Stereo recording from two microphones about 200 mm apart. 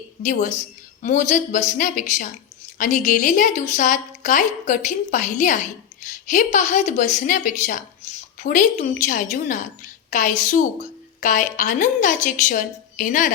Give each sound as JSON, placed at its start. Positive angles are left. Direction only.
{"t": 0.2, "sound": "a woman's voice", "side_deg": 40}